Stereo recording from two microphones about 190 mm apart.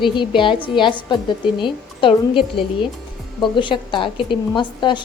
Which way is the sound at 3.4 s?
25° left (ahead or behind).